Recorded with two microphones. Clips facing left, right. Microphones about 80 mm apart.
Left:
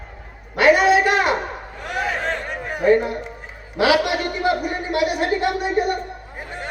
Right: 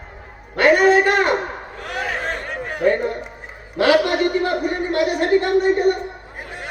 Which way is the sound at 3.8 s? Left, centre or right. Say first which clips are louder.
Right 2 dB; centre.